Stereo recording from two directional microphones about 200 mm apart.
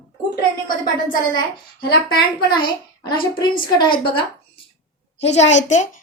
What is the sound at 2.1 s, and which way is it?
A woman's voice, 20° left (ahead or behind).